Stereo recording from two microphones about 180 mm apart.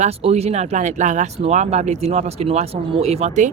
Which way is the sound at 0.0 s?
35° right (ahead or behind).